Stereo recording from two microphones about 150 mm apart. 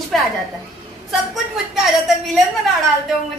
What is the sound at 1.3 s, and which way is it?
Speech, centre (ahead or behind).